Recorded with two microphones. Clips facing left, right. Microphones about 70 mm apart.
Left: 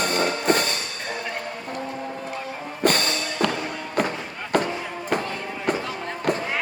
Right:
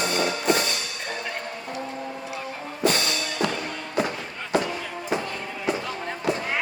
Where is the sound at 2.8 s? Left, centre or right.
Left.